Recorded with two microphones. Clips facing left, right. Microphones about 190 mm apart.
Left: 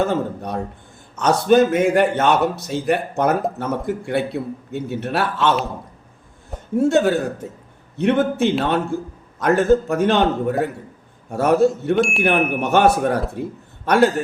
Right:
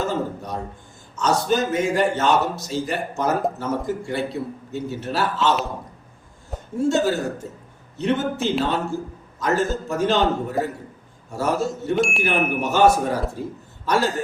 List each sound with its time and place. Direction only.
0.0 s a man's voice: 60° left (ahead or behind)
6.7 s a man's voice: 60° left (ahead or behind)
11.3 s a man's voice: 60° left (ahead or behind)
11.9 s speech: centre (ahead or behind)
12.2 s a man's voice: 60° left (ahead or behind)